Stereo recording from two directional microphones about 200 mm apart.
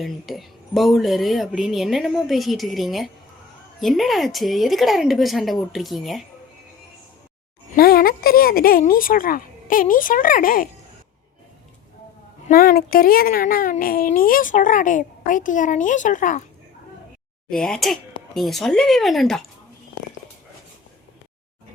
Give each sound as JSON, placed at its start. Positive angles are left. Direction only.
{"t": 0.0, "sound": "speech", "side_deg": 0}
{"t": 7.8, "sound": "speech", "side_deg": 50}
{"t": 12.5, "sound": "speech", "side_deg": 50}
{"t": 17.5, "sound": "speech", "side_deg": 5}